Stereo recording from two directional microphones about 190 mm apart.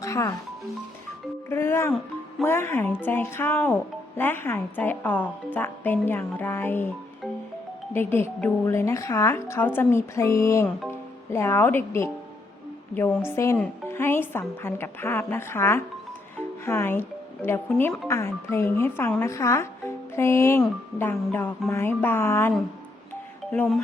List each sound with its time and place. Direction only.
0.0 s speech: 15° left (ahead or behind)
1.5 s a woman's voice: 15° left (ahead or behind)
7.9 s a woman's voice: 10° left (ahead or behind)